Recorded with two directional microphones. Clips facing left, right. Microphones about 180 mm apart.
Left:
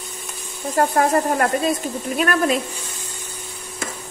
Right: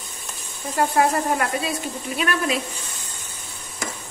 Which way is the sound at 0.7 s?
50° left (ahead or behind).